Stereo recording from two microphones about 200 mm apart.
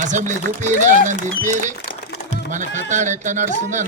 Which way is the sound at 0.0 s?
40° right (ahead or behind).